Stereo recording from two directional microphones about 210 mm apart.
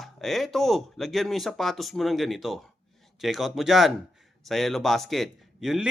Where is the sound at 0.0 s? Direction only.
Centre (ahead or behind).